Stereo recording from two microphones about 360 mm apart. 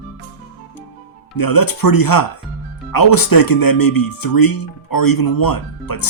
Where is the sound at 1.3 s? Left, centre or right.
Left.